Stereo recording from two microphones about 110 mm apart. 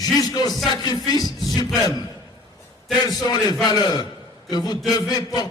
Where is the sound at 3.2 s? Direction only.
35° left (ahead or behind).